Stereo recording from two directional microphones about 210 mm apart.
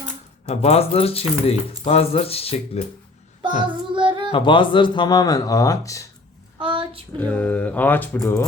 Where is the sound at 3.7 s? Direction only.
25° right (ahead or behind).